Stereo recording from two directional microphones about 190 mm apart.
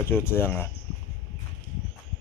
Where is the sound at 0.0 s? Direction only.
10° left (ahead or behind).